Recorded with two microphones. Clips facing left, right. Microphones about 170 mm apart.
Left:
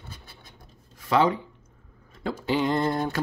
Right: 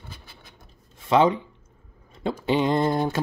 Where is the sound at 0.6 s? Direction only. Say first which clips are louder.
Even; 20° right (ahead or behind).